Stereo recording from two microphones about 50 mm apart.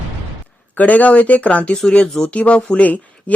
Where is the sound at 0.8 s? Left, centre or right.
Left.